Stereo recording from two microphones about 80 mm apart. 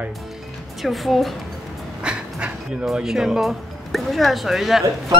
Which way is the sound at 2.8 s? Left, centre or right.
Centre.